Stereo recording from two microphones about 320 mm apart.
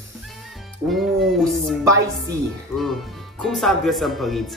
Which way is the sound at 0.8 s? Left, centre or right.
Centre.